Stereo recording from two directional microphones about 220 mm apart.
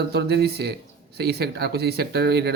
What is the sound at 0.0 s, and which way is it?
Speech, 50° right (ahead or behind).